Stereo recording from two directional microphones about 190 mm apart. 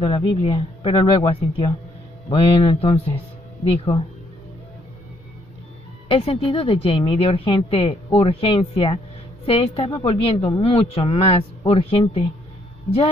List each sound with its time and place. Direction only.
0.0 s a woman's voice: 25° left (ahead or behind)
6.0 s a woman's voice: 30° left (ahead or behind)